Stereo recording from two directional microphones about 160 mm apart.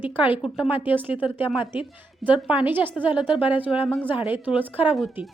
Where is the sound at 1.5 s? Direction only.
30° left (ahead or behind).